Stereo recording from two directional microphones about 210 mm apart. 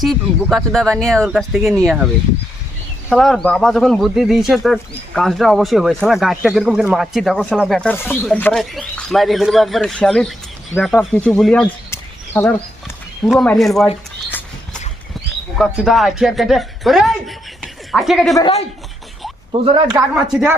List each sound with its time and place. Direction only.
0.0 s speech: centre (ahead or behind)
3.1 s speech: centre (ahead or behind)
13.2 s speech: centre (ahead or behind)
13.5 s a sound: centre (ahead or behind)
15.5 s speech: centre (ahead or behind)
19.6 s a man's voice: 20° right (ahead or behind)
20.3 s speech: 10° right (ahead or behind)